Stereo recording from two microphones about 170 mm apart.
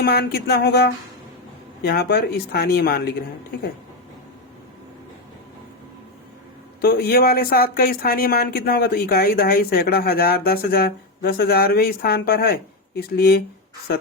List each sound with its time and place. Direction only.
0.0 s speech: 65° left (ahead or behind)
6.8 s speech: 65° left (ahead or behind)